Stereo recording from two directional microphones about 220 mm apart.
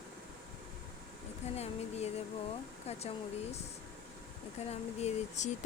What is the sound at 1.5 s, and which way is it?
Speech, 30° left (ahead or behind).